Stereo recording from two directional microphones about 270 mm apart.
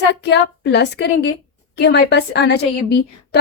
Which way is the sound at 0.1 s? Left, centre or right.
Left.